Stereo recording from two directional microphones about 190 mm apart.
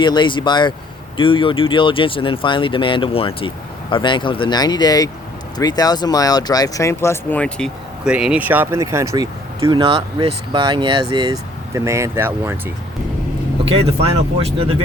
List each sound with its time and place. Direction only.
0.0 s speech: 25° left (ahead or behind); by 7.7 s 5° left (ahead or behind)
8.0 s speech: 5° right (ahead or behind)
14.3 s speech: 30° right (ahead or behind)